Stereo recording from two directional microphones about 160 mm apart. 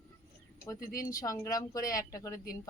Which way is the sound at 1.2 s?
20° left (ahead or behind).